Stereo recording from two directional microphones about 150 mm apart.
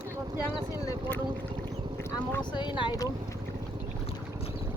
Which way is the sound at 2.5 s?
30° left (ahead or behind).